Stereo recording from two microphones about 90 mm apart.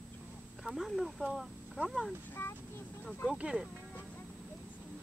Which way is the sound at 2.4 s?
25° left (ahead or behind).